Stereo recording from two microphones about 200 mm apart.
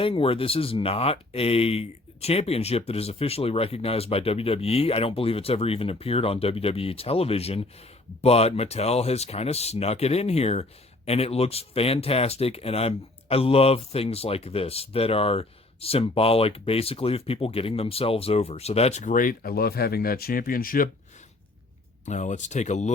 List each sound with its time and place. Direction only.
0.0 s speech: 25° left (ahead or behind); by 20.9 s 45° left (ahead or behind)
22.0 s speech: 35° left (ahead or behind)